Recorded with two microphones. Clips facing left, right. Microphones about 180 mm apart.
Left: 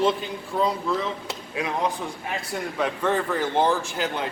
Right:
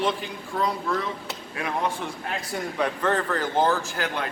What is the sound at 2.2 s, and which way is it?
A man's voice, centre (ahead or behind).